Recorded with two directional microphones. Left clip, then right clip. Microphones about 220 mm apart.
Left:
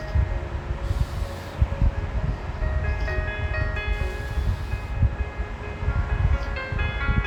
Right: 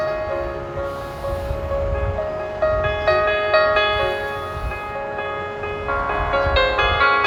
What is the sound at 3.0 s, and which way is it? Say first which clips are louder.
Music: right 14 dB; 55° right (ahead or behind).